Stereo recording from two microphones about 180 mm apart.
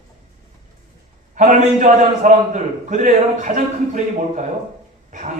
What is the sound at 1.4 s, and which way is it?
A man's voice, 45° right (ahead or behind).